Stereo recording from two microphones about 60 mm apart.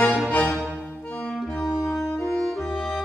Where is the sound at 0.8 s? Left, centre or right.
Left.